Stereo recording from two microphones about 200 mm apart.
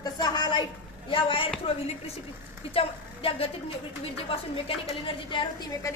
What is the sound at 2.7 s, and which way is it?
A woman's voice, 30° left (ahead or behind).